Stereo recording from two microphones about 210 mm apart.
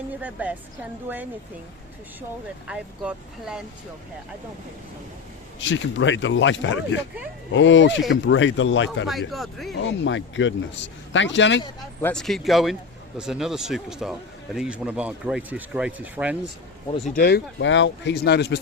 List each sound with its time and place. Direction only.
0.2 s a woman's voice: 5° right (ahead or behind)
2.6 s speech: 5° right (ahead or behind)
5.5 s speech: 60° left (ahead or behind)
9.0 s speech: centre (ahead or behind)
9.8 s speech: 60° left (ahead or behind)
12.0 s speech: centre (ahead or behind)
17.2 s speech: 50° left (ahead or behind)